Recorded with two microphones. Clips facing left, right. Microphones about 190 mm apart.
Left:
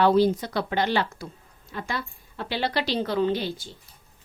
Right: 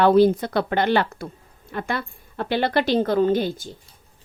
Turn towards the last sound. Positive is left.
turn(degrees=-45)  # may be behind; listen again after turning